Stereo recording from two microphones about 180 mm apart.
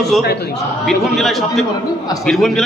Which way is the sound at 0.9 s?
Centre (ahead or behind).